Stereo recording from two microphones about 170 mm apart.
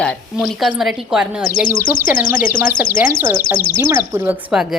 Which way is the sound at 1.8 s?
55° left (ahead or behind).